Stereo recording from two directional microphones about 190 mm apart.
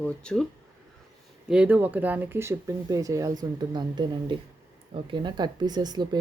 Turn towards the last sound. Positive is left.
turn(degrees=-20)  # may be behind; listen again after turning